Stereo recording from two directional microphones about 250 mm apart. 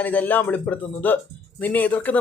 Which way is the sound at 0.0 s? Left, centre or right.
Centre.